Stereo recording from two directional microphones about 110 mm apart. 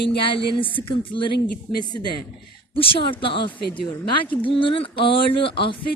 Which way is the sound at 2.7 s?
55° left (ahead or behind).